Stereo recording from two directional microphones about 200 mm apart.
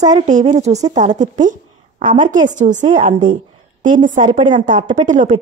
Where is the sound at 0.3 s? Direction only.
35° right (ahead or behind).